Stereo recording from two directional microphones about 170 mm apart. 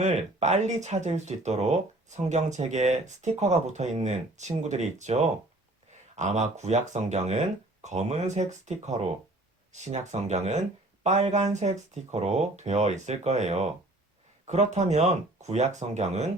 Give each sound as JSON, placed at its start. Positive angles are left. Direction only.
{"t": 0.0, "sound": "speech", "side_deg": -40}